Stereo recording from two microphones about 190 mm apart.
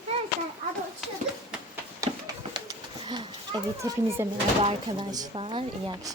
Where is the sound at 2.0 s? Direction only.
20° right (ahead or behind).